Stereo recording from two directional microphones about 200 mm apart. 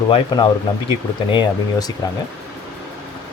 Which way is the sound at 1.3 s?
20° left (ahead or behind).